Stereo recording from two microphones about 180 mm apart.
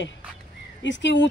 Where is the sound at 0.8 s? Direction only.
85° left.